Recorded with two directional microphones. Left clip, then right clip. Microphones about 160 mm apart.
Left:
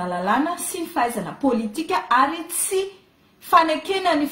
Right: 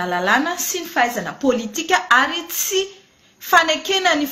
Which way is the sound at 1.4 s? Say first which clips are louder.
Right 2 dB; centre (ahead or behind).